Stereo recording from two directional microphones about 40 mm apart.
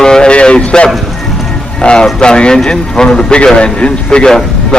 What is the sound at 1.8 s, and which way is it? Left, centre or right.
Speech, left.